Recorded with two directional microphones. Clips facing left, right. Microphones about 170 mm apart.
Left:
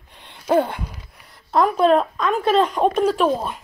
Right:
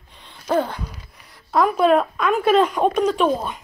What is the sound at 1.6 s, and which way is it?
Speech, 5° right (ahead or behind).